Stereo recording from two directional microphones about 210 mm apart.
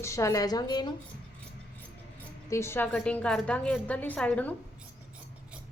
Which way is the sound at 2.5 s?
10° left (ahead or behind).